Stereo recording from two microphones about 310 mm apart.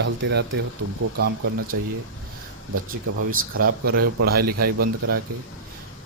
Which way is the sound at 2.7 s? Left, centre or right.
Right.